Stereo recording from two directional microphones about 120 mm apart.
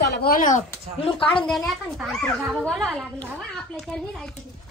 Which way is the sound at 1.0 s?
50° left (ahead or behind).